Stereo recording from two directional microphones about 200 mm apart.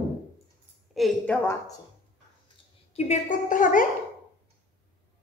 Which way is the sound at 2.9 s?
35° left (ahead or behind).